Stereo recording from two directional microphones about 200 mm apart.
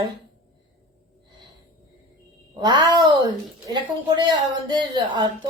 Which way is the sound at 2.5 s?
20° right (ahead or behind).